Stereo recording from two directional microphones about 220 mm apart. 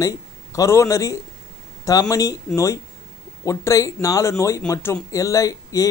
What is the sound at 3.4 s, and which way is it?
Speech, 15° left (ahead or behind).